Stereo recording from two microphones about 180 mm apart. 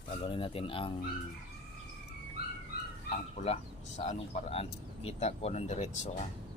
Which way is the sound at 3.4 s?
40° left (ahead or behind).